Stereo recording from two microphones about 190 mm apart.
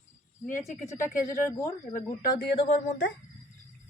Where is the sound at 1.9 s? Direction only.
45° left (ahead or behind).